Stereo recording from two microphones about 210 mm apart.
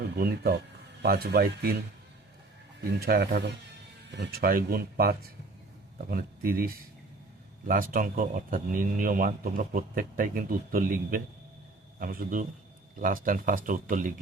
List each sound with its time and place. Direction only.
1.0 s speech: 45° right (ahead or behind)
3.0 s a man's voice: 45° right (ahead or behind)